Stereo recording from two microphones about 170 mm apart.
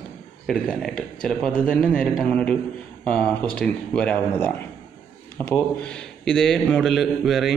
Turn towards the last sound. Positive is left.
turn(degrees=0)  # may be behind; listen again after turning